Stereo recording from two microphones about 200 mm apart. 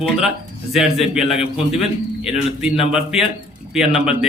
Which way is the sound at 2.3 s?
5° right (ahead or behind).